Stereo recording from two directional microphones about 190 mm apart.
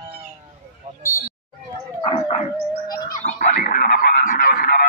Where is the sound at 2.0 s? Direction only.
30° left (ahead or behind).